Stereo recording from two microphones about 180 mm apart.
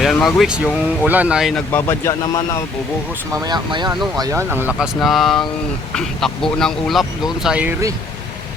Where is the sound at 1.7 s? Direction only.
15° left (ahead or behind).